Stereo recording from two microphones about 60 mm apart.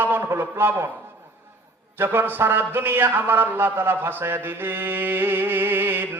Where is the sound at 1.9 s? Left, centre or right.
Right.